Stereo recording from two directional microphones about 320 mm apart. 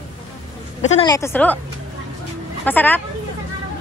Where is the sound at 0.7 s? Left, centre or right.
Centre.